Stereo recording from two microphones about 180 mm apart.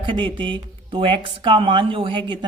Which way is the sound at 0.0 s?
30° right (ahead or behind).